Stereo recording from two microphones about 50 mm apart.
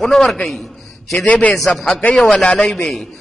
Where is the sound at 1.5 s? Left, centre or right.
Centre.